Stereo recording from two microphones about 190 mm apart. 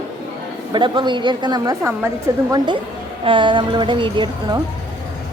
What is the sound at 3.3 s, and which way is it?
Speech, 25° right (ahead or behind).